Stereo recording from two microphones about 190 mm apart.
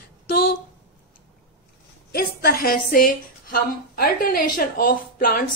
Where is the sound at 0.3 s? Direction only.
50° left (ahead or behind).